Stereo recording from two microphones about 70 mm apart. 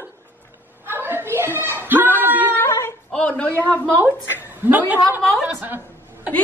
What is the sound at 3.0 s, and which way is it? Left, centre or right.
Speech, centre.